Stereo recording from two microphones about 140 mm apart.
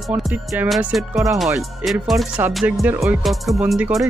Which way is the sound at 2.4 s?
10° right (ahead or behind).